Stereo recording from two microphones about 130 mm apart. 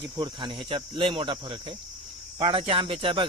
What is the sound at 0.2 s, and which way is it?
Cricket, 40° right (ahead or behind).